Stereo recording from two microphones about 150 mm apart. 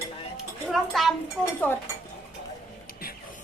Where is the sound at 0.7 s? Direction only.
Centre (ahead or behind).